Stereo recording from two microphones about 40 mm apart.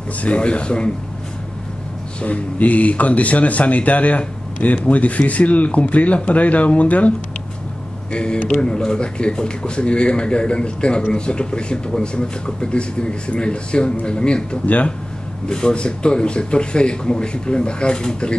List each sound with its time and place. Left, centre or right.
0.2 s speech: left
2.2 s speech: left
8.1 s speech: left